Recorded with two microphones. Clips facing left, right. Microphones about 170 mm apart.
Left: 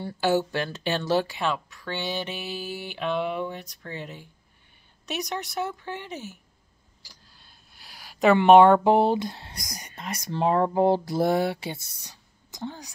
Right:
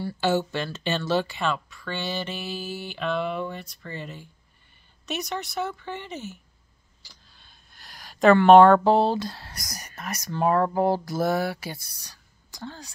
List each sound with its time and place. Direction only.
0.0 s speech: 15° left (ahead or behind)